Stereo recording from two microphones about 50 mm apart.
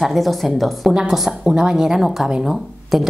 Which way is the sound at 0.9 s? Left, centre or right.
Centre.